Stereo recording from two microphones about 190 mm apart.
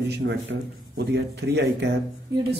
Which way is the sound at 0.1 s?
65° right (ahead or behind).